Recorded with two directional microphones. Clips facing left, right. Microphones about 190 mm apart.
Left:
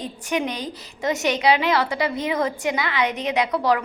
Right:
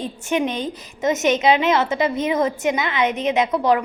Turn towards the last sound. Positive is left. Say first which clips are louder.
# right 3 dB
turn(degrees=-20)  # may be behind; listen again after turning